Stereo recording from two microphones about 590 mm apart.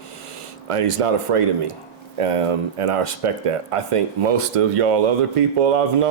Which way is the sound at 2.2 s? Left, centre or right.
Right.